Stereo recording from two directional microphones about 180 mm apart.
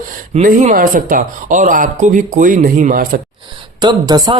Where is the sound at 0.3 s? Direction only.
45° right (ahead or behind).